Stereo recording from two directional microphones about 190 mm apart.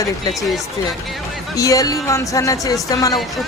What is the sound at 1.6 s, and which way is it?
Speech, 20° left (ahead or behind).